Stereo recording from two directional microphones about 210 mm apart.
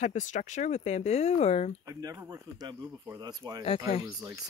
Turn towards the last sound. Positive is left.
turn(degrees=-10)  # may be behind; listen again after turning